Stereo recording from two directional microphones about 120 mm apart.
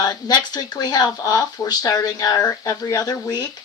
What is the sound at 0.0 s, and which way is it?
Speech, 35° left (ahead or behind).